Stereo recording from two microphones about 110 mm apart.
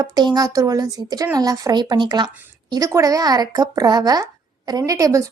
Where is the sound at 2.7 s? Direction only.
30° right (ahead or behind).